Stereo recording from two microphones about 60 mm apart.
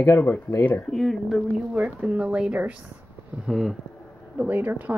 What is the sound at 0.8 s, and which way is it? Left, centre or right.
Speech, centre.